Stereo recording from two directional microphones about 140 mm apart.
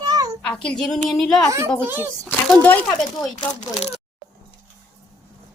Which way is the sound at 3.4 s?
40° left (ahead or behind).